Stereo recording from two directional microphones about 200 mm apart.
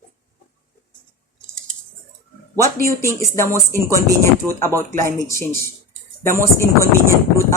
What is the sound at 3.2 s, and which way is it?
Speech, 15° left (ahead or behind).